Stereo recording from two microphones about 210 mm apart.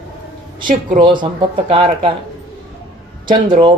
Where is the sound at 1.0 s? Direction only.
20° right (ahead or behind).